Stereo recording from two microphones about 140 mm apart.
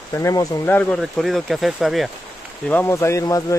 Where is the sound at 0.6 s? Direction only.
10° left (ahead or behind).